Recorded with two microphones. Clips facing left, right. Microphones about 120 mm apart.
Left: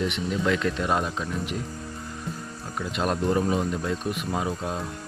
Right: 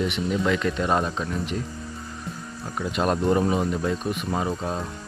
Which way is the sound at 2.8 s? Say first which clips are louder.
Right 3 dB; centre (ahead or behind).